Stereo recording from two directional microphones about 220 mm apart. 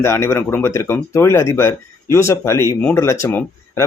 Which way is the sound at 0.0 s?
10° left (ahead or behind).